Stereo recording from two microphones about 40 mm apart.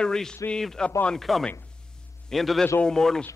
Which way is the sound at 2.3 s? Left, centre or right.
Centre.